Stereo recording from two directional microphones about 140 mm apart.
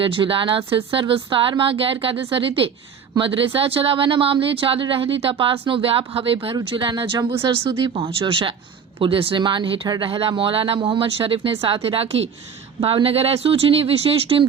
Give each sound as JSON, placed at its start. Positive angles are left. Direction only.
{"t": 0.0, "sound": "speech", "side_deg": -40}